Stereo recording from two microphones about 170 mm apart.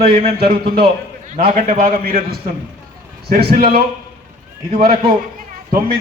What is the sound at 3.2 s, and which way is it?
Speech, 65° right (ahead or behind).